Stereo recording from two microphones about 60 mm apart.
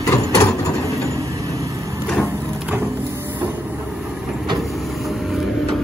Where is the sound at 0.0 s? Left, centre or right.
Left.